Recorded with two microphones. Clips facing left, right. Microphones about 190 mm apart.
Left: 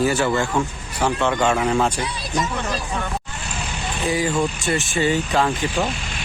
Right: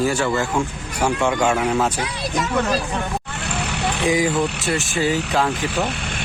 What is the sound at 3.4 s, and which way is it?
Vehicle, 65° right (ahead or behind).